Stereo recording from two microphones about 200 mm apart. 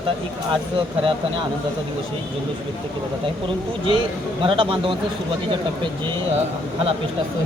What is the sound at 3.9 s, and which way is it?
Speech, 25° right (ahead or behind).